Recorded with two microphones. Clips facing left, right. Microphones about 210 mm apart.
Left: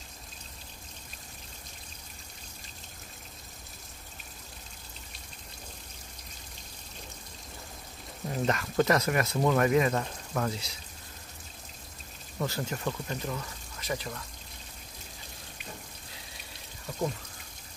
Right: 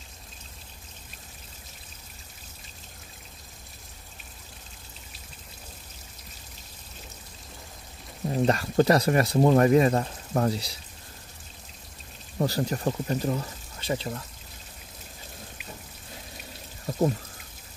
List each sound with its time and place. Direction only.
8.3 s speech: 35° right (ahead or behind)
12.4 s speech: 35° right (ahead or behind)
16.9 s pour: 35° right (ahead or behind)